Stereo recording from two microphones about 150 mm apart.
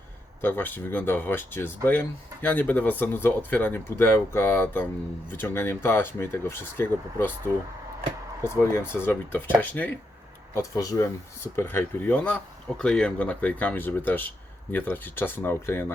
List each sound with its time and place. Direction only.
0.4 s speech: 15° left (ahead or behind)
8.9 s speech: 15° left (ahead or behind)
10.5 s speech: 20° left (ahead or behind)